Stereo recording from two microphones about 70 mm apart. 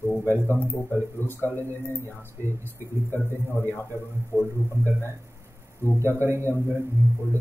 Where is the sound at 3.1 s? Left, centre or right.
Left.